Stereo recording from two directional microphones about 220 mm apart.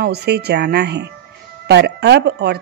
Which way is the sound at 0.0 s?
50° right (ahead or behind).